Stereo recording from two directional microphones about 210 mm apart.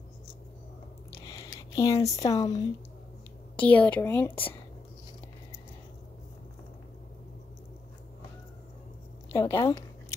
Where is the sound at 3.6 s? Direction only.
5° left (ahead or behind).